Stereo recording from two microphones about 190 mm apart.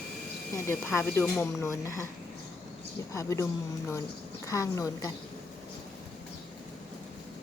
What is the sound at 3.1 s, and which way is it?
Speech, 15° left (ahead or behind).